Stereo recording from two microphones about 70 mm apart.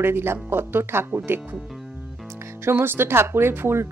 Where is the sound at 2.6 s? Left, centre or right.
Right.